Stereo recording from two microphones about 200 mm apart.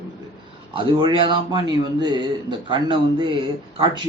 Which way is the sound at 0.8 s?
25° right (ahead or behind).